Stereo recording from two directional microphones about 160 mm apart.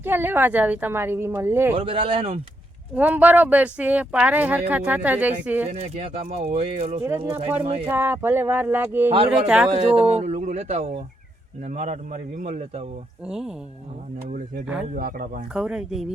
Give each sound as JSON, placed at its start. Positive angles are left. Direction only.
{"t": 0.0, "sound": "a woman's voice", "side_deg": -15}
{"t": 1.7, "sound": "speech", "side_deg": -35}
{"t": 2.9, "sound": "a woman's voice", "side_deg": -10}
{"t": 5.7, "sound": "a man's voice", "side_deg": -45}
{"t": 7.0, "sound": "a woman's voice", "side_deg": -15}
{"t": 7.6, "sound": "speech", "side_deg": -35}
{"t": 7.9, "sound": "a woman's voice", "side_deg": -15}
{"t": 9.7, "sound": "a man's voice", "side_deg": -40}
{"t": 13.2, "sound": "speech", "side_deg": -5}
{"t": 14.6, "sound": "speech", "side_deg": -5}
{"t": 14.9, "sound": "speech", "side_deg": -65}
{"t": 15.5, "sound": "speech", "side_deg": -5}